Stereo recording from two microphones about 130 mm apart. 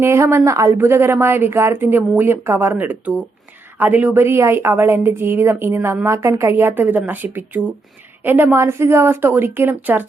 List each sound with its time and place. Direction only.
0.0 s a woman's voice: 20° right (ahead or behind)